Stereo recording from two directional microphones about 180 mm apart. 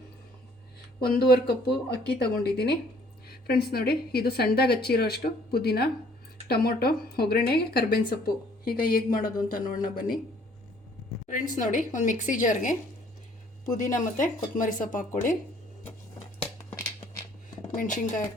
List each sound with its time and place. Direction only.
1.0 s speech: 60° left (ahead or behind)
11.3 s a woman's voice: 45° left (ahead or behind)
16.6 s a sound: 15° left (ahead or behind)
17.7 s speech: 45° left (ahead or behind)